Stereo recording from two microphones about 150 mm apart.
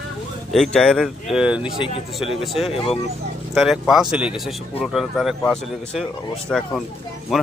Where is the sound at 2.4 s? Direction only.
Centre (ahead or behind).